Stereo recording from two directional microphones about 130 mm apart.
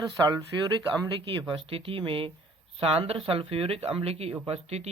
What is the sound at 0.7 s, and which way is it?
Speech, 35° right (ahead or behind).